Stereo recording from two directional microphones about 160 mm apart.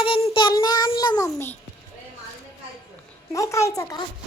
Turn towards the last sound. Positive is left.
turn(degrees=20)  # may be behind; listen again after turning